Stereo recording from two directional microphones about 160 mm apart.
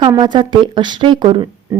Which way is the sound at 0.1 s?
25° right (ahead or behind).